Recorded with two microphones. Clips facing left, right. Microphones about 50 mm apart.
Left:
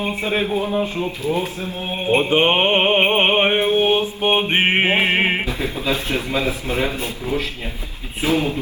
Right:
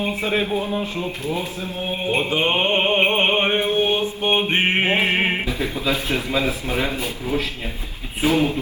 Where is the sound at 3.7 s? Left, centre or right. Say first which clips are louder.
Left 3 dB; left.